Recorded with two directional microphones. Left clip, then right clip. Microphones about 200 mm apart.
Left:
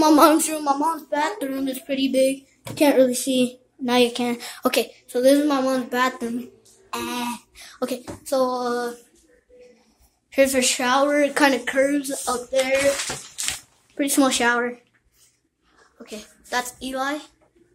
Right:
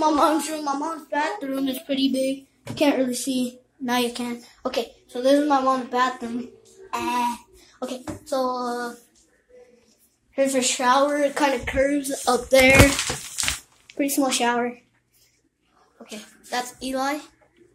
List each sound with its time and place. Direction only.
0.0 s a woman's voice: 35° left (ahead or behind)
1.6 s a woman's voice: centre (ahead or behind)
2.0 s a woman's voice: 15° left (ahead or behind)
4.2 s a woman's voice: 40° left (ahead or behind)
10.5 s a woman's voice: 20° left (ahead or behind)
11.6 s speech: 10° left (ahead or behind)
12.3 s music: 25° right (ahead or behind)
13.9 s speech: 15° left (ahead or behind)
16.0 s speech: 20° left (ahead or behind)